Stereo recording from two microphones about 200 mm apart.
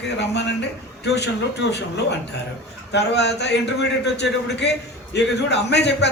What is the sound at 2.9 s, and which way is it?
A man's voice, 60° left (ahead or behind).